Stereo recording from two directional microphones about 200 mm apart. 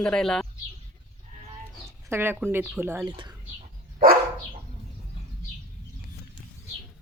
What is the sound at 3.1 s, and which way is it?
Speech, 20° right (ahead or behind).